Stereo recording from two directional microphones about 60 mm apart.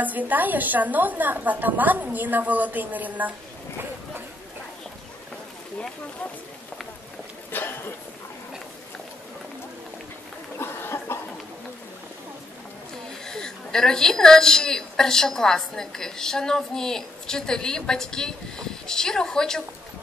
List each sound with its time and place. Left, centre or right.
0.0 s a woman's voice: right
7.5 s a sound: left
10.6 s cough: left
13.2 s a woman's voice: centre